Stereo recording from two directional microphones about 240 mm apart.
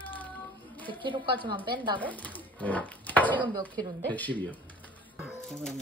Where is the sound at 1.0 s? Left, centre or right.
Right.